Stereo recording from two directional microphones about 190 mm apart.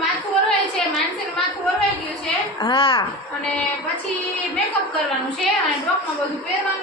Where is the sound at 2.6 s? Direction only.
25° left (ahead or behind).